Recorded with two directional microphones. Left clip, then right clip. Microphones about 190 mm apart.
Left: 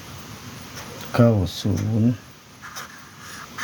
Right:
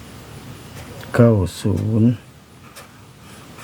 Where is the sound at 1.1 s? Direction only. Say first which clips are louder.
Right 4 dB; 30° right (ahead or behind).